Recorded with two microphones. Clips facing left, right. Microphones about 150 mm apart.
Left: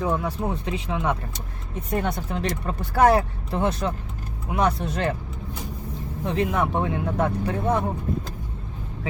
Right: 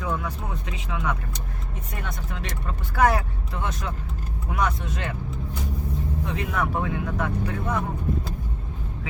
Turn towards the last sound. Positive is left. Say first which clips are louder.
# left 4 dB
turn(degrees=30)  # may be behind; listen again after turning